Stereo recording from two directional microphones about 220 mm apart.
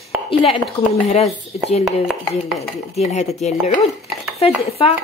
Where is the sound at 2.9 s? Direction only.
30° left (ahead or behind).